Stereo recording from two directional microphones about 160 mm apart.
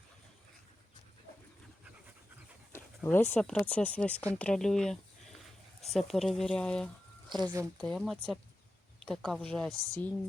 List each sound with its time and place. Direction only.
2.7 s speech: 15° left (ahead or behind)
7.3 s speech: 25° right (ahead or behind)
7.8 s speech: 5° left (ahead or behind)